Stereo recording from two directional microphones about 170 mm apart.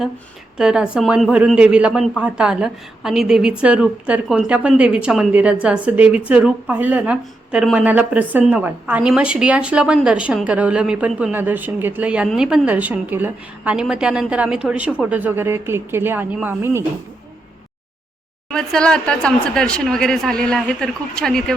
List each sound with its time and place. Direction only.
0.5 s speech: 5° right (ahead or behind)
18.5 s speech: 5° left (ahead or behind)